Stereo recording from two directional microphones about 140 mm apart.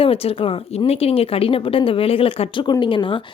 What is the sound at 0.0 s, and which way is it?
Speech, 45° left (ahead or behind).